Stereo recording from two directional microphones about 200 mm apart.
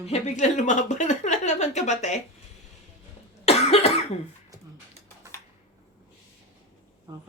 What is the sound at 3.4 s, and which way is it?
Cough, 30° left (ahead or behind).